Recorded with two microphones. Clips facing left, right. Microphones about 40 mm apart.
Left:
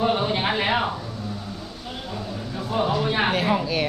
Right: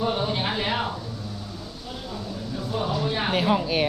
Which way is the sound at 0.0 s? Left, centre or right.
Left.